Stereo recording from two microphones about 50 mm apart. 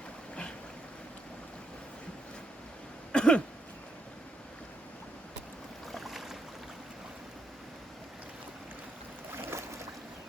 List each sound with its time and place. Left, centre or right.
3.1 s throat clearing: centre
5.9 s boat: centre
9.3 s boat: right